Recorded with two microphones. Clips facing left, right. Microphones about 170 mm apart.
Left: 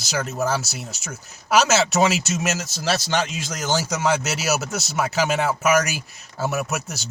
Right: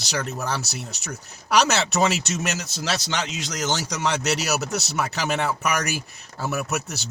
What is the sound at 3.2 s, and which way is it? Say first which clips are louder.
Speech: left 2 dB; 50° left (ahead or behind).